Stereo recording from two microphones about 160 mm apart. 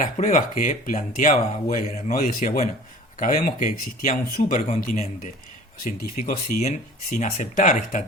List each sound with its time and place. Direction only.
0.0 s speech: 55° left (ahead or behind)